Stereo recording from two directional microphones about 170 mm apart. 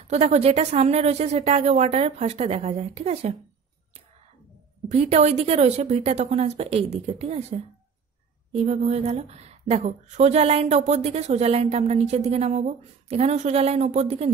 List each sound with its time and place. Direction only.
0.1 s a woman's voice: 40° right (ahead or behind)
4.9 s a woman's voice: 40° right (ahead or behind)